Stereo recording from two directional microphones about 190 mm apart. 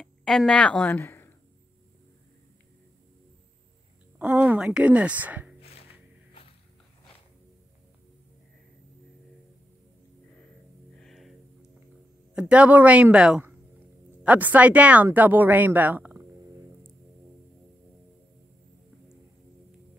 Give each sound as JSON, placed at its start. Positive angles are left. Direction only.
{"t": 0.0, "sound": "a woman's voice", "side_deg": 0}
{"t": 4.2, "sound": "speech", "side_deg": -10}
{"t": 5.6, "sound": "music", "side_deg": 30}
{"t": 11.0, "sound": "music", "side_deg": 0}
{"t": 12.4, "sound": "speech", "side_deg": -5}